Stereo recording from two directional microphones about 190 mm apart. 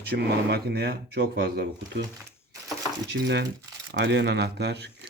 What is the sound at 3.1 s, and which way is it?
Speech, 65° right (ahead or behind).